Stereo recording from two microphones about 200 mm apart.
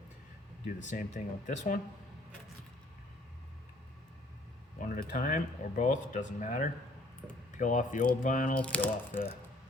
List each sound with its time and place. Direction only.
0.6 s speech: 35° left (ahead or behind)
4.8 s speech: 40° left (ahead or behind)
8.5 s speech: 5° left (ahead or behind)